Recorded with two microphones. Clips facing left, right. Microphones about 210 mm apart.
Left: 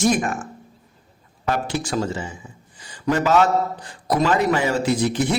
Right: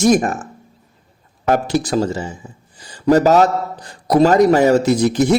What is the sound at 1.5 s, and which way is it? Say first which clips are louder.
A man's voice: right 7 dB; 45° right (ahead or behind).